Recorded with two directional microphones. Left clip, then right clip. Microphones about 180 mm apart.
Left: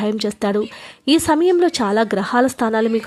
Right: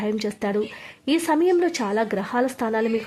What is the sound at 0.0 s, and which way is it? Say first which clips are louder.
A woman's voice: left 5 dB; 25° left (ahead or behind).